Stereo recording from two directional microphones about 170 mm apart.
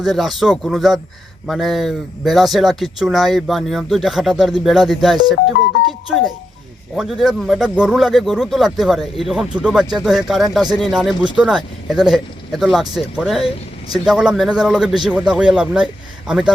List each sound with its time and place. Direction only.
0.0 s speech: centre (ahead or behind)
6.9 s speech: centre (ahead or behind)